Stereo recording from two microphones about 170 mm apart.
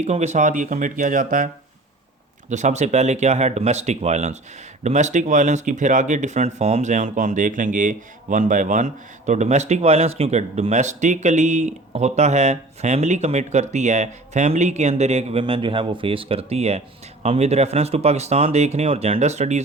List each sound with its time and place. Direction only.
0.0 s speech: 40° right (ahead or behind)
2.5 s speech: 45° right (ahead or behind)